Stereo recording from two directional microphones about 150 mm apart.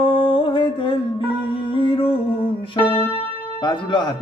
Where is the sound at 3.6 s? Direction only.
30° left (ahead or behind).